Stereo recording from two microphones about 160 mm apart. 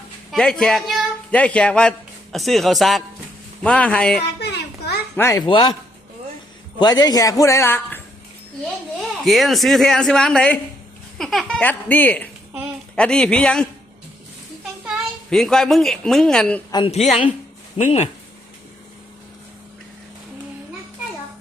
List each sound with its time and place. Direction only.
0.3 s speech: 5° left (ahead or behind)
4.4 s babbling: 90° left
5.1 s speech: 15° left (ahead or behind)
5.5 s a man's voice: 25° left (ahead or behind)
6.7 s a man's voice: 25° left (ahead or behind)
9.2 s speech: centre (ahead or behind)
14.8 s a child's voice: centre (ahead or behind)
16.9 s speech: 45° left (ahead or behind)